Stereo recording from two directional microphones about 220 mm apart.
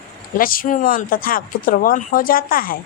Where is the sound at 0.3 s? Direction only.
40° left (ahead or behind).